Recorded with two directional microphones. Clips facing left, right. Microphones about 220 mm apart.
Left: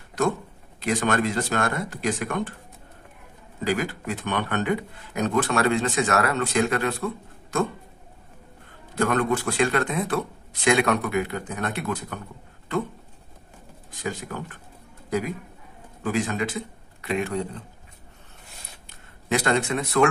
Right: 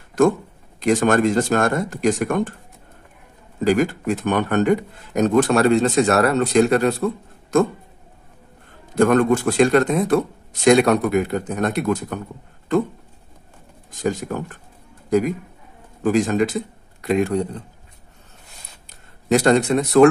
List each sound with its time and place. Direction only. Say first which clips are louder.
0.8 s speech: right 7 dB; 45° right (ahead or behind)
3.6 s speech: right 8 dB; 45° right (ahead or behind)
8.9 s speech: right 7 dB; 45° right (ahead or behind)
13.9 s a man's voice: right 8 dB; 45° right (ahead or behind)
19.3 s a man's voice: right 8 dB; 40° right (ahead or behind)